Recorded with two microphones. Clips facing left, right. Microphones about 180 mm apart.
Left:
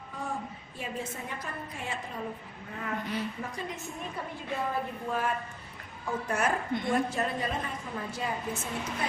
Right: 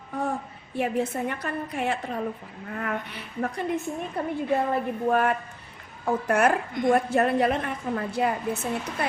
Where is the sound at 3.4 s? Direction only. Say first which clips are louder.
Right 10 dB; 65° right (ahead or behind).